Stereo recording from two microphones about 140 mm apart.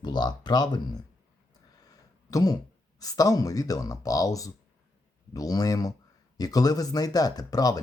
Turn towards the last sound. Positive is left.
turn(degrees=25)  # may be behind; listen again after turning